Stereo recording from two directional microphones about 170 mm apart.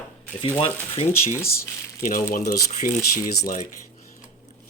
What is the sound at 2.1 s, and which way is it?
Speech, 55° left (ahead or behind).